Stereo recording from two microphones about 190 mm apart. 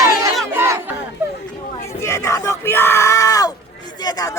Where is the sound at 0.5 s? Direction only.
15° right (ahead or behind).